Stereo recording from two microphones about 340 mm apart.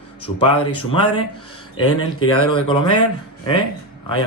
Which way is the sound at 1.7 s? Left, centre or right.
Left.